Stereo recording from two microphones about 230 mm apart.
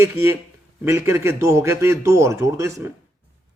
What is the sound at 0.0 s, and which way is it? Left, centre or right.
A man's voice, centre.